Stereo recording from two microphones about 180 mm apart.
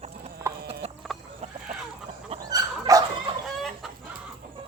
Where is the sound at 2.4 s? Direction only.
20° right (ahead or behind).